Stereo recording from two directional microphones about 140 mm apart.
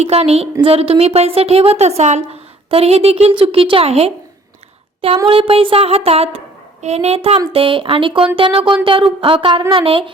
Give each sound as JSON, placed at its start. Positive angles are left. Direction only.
{"t": 0.0, "sound": "a woman's voice", "side_deg": -50}
{"t": 5.3, "sound": "a woman's voice", "side_deg": -40}